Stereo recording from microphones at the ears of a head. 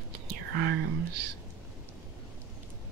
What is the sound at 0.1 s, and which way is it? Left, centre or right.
Whispering, right.